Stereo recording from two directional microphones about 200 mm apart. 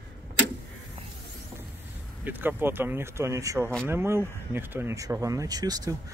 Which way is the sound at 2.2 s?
10° right (ahead or behind).